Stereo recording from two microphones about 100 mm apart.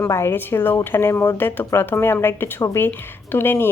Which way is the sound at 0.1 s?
25° left (ahead or behind).